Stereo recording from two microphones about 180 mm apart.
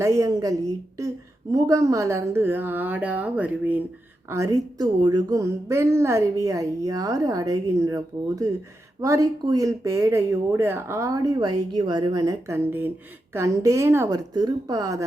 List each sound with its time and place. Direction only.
0.0 s a woman's voice: 15° right (ahead or behind)